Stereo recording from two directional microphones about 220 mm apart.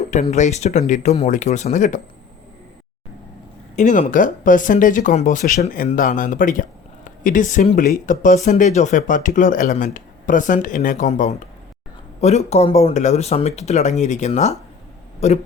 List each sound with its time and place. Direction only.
0.0 s speech: 30° left (ahead or behind)
3.8 s speech: 35° left (ahead or behind)